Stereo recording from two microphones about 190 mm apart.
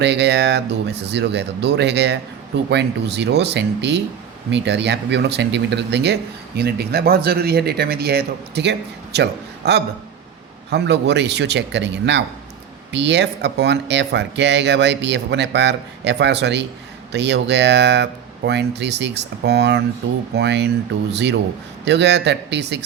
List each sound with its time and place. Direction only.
0.0 s speech: 65° right (ahead or behind)